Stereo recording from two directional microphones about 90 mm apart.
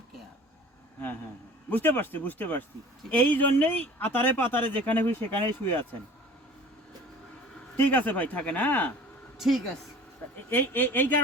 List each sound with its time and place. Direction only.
1.7 s speech: 20° left (ahead or behind)
7.8 s speech: 20° left (ahead or behind)
10.5 s speech: 25° left (ahead or behind)